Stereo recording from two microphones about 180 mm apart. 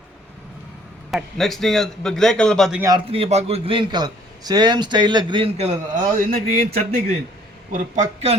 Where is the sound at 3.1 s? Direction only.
35° right (ahead or behind).